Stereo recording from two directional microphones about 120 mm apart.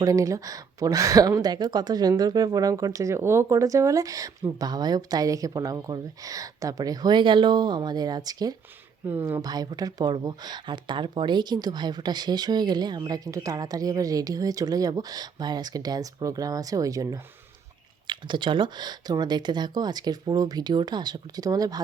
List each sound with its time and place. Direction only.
0.0 s speech: 30° right (ahead or behind)
18.1 s speech: 40° right (ahead or behind)